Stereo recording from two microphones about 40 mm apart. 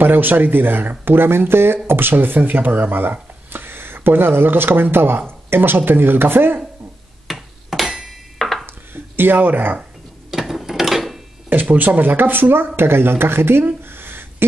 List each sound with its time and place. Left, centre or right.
0.0 s speech: right
1.9 s speech: right
7.2 s hammer: centre
8.9 s speech: right
10.3 s mechanisms: centre
11.4 s speech: right
13.9 s a sound: right